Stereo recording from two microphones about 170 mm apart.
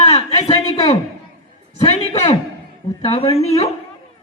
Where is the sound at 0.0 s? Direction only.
35° left (ahead or behind).